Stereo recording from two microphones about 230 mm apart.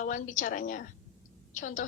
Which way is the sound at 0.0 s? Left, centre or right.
Left.